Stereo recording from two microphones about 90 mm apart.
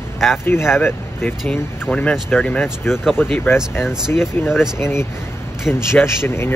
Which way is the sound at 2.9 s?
5° right (ahead or behind).